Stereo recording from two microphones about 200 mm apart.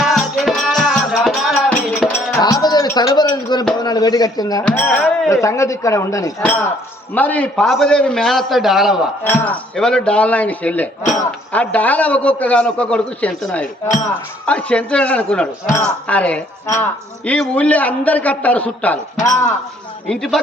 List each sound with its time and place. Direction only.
0.0 s music: centre (ahead or behind)
2.4 s a man's voice: 20° left (ahead or behind); by 9.0 s centre (ahead or behind)
9.2 s speech: 10° left (ahead or behind)
20.1 s a man's voice: centre (ahead or behind)